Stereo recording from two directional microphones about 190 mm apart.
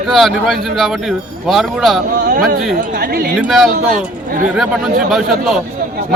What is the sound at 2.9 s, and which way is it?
Speech, 50° right (ahead or behind).